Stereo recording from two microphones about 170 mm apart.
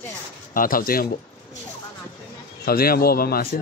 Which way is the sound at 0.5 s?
55° left (ahead or behind).